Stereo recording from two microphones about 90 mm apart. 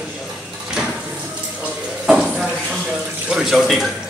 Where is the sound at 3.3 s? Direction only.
5° right (ahead or behind).